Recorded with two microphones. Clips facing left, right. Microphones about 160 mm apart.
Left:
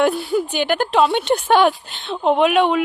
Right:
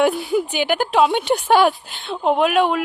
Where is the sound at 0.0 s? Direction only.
15° right (ahead or behind).